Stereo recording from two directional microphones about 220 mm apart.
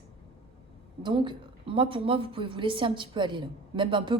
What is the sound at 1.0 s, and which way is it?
A woman's voice, 20° right (ahead or behind).